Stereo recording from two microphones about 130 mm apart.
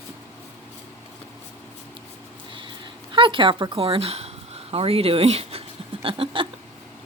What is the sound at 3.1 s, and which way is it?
A woman's voice, 40° right (ahead or behind).